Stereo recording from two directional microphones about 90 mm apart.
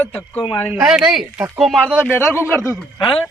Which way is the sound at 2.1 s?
25° left (ahead or behind).